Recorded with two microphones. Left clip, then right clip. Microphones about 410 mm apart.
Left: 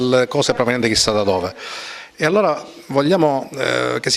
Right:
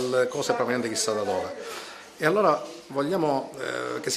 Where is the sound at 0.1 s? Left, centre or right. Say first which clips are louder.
Left 8 dB; left.